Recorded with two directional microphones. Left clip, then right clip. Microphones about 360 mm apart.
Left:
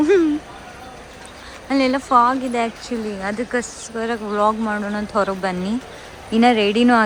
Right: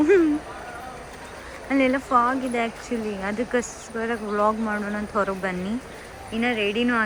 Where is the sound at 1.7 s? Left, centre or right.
Centre.